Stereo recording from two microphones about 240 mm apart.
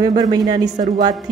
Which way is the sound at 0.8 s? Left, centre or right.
Right.